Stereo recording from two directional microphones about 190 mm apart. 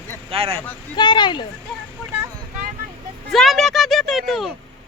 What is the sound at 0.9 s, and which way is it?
Speech, 25° left (ahead or behind).